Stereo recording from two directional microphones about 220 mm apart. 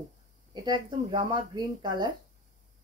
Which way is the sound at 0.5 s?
20° right (ahead or behind).